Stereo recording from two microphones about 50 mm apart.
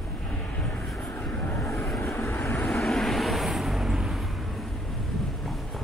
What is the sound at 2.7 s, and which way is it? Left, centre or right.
Vehicle, centre.